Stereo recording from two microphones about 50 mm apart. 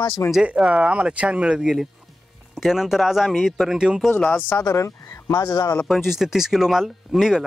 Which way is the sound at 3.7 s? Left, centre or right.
Centre.